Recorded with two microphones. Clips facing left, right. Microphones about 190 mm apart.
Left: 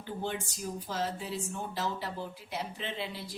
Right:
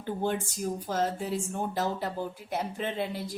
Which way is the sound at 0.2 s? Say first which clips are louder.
Right 6 dB; 50° right (ahead or behind).